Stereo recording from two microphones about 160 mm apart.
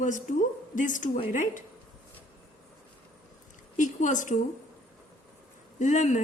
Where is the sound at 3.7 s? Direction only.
50° left (ahead or behind).